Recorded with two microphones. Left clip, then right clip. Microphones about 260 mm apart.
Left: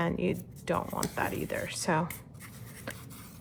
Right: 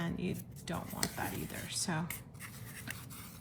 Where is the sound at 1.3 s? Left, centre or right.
Left.